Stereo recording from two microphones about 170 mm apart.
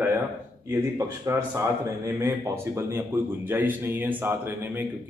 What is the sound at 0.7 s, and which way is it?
A man's voice, 20° right (ahead or behind).